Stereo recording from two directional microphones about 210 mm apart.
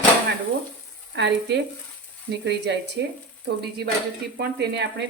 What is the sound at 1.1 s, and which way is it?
Speech, 55° right (ahead or behind).